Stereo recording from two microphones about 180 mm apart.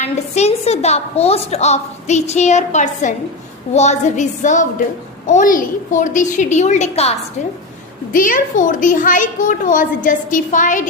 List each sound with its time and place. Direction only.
0.0 s a woman's voice: 35° left (ahead or behind)
8.1 s a woman's voice: 50° left (ahead or behind)